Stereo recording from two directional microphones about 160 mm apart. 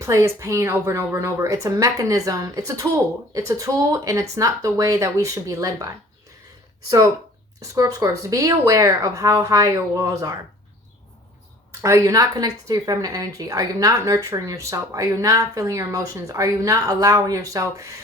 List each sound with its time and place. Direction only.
0.0 s a woman's voice: 20° right (ahead or behind)
7.6 s a woman's voice: 20° right (ahead or behind)
11.8 s a woman's voice: 20° right (ahead or behind)